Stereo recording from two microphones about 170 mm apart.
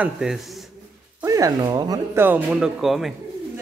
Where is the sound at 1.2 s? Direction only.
20° right (ahead or behind); by 3.2 s centre (ahead or behind).